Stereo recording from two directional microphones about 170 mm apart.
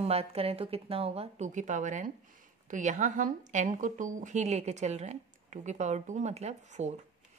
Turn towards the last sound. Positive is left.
turn(degrees=-40)  # may be behind; listen again after turning